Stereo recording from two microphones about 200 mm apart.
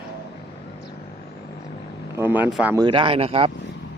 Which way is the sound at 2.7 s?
25° right (ahead or behind).